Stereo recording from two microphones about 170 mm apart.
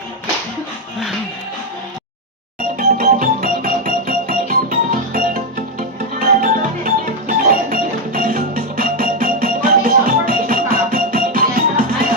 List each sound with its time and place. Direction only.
2.7 s music: 50° right (ahead or behind)